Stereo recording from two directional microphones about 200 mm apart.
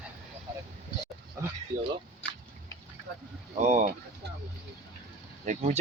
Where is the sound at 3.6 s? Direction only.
40° right (ahead or behind).